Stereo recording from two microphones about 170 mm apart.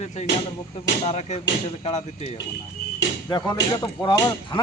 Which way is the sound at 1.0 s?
40° left (ahead or behind).